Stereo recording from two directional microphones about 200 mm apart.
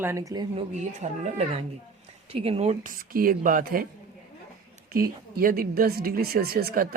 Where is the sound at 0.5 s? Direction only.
35° right (ahead or behind).